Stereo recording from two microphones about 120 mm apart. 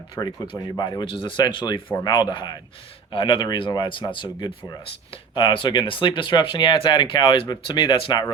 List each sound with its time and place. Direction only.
0.2 s speech: 35° left (ahead or behind)